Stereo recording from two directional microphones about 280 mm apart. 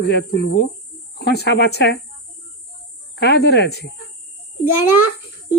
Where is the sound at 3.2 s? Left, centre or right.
Left.